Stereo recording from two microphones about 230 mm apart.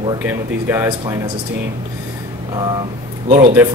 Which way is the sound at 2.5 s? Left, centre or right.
Centre.